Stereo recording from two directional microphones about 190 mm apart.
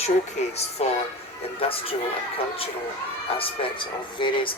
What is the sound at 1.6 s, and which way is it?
Speech, 30° left (ahead or behind).